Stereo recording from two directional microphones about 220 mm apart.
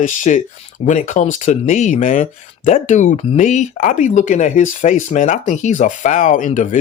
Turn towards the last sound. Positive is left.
turn(degrees=35)  # may be behind; listen again after turning